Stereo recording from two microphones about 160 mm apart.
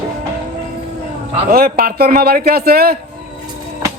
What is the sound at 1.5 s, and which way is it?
A man's voice, 65° right (ahead or behind).